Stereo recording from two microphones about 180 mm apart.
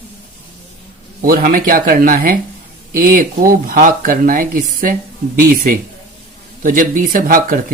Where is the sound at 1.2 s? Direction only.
50° right (ahead or behind).